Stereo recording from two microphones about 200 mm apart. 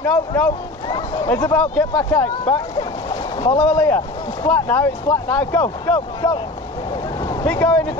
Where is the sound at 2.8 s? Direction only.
20° left (ahead or behind).